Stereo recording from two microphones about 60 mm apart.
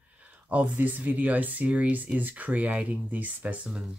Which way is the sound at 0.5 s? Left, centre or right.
Right.